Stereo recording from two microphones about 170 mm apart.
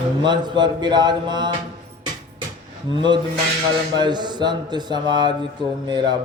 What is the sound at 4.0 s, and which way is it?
A man's voice, 25° right (ahead or behind).